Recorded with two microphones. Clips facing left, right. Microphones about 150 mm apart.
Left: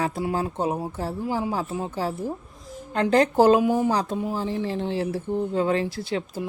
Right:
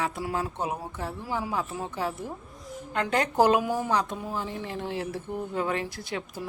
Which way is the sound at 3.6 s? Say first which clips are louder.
Left 7 dB; 20° left (ahead or behind).